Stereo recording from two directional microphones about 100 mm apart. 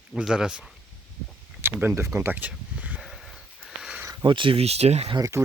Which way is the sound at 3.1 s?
Centre (ahead or behind).